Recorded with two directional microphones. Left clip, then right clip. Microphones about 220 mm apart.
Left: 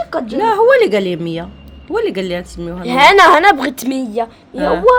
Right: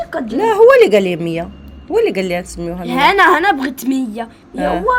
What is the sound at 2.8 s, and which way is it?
A woman's voice, 45° left (ahead or behind).